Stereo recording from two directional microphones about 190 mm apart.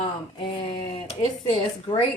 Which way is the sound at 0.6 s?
30° left (ahead or behind).